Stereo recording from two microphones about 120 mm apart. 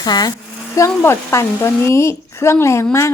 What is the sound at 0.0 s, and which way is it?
Speech, 35° left (ahead or behind).